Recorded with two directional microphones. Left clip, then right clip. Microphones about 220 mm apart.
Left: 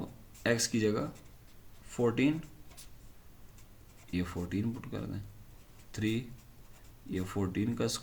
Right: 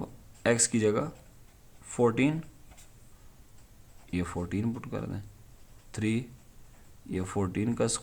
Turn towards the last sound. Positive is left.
turn(degrees=-40)  # may be behind; listen again after turning